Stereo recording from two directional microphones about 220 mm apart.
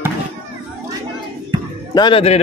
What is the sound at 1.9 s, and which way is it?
Speech, 20° left (ahead or behind).